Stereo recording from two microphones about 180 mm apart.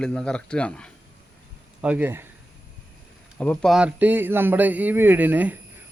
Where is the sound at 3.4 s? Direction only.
5° left (ahead or behind).